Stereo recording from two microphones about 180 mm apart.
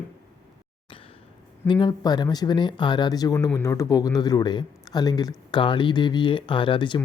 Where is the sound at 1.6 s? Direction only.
25° left (ahead or behind).